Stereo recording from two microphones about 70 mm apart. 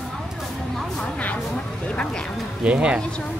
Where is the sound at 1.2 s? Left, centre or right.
Centre.